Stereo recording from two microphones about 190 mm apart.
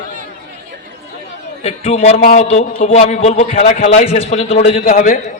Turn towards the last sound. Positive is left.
turn(degrees=50)  # may be behind; listen again after turning